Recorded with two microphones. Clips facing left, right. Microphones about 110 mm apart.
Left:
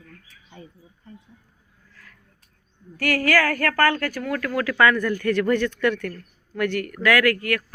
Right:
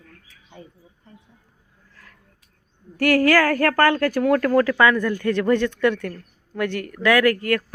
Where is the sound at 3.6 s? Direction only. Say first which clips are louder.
Right 3 dB; 35° right (ahead or behind).